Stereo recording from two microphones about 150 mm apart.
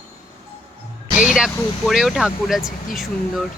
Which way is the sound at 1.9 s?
Centre (ahead or behind).